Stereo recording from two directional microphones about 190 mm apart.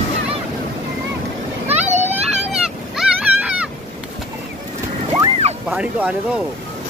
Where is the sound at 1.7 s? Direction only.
35° right (ahead or behind).